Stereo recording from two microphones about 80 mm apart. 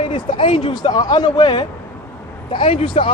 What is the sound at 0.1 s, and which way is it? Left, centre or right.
Speech, left.